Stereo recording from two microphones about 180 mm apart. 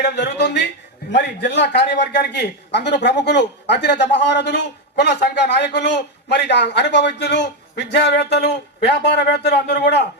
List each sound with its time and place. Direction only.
0.0 s a man's voice: 70° left (ahead or behind)